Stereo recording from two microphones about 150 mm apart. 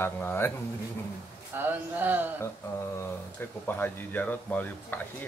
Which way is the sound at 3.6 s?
15° left (ahead or behind).